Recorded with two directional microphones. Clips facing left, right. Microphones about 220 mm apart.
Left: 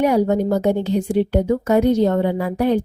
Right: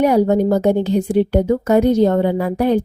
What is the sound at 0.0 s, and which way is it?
A woman's voice, 40° right (ahead or behind).